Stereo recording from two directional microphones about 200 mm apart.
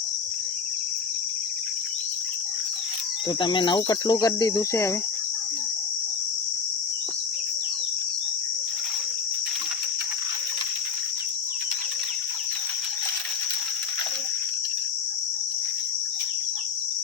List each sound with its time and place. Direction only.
3.4 s cricket: 25° left (ahead or behind)